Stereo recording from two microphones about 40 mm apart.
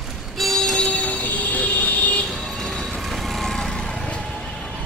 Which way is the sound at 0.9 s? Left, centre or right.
Left.